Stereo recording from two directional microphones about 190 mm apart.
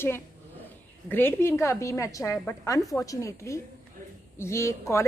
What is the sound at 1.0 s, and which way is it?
A woman's voice, 10° left (ahead or behind).